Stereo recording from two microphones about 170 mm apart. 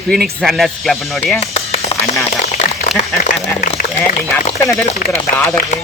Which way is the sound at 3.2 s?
50° left (ahead or behind).